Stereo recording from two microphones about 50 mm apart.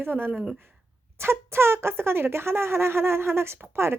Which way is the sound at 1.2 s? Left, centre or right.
Right.